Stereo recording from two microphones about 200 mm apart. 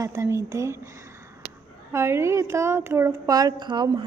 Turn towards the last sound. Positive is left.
turn(degrees=-20)  # may be behind; listen again after turning